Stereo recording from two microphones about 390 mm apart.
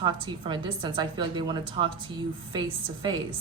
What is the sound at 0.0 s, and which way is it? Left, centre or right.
A woman's voice, centre.